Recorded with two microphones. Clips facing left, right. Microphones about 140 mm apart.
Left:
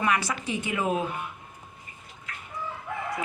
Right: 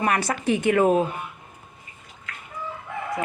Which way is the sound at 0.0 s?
50° right (ahead or behind).